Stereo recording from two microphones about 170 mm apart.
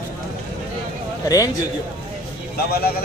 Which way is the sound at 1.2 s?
20° left (ahead or behind).